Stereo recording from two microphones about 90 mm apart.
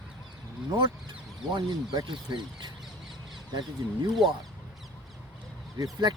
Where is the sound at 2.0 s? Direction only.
60° right (ahead or behind).